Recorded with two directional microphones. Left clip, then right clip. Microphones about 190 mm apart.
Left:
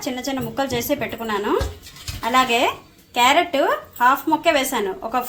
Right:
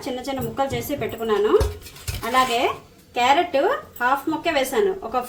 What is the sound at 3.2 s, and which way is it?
A woman's voice, 35° left (ahead or behind).